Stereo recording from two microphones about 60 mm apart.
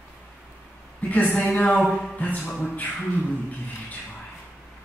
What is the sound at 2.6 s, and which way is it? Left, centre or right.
Speech, left.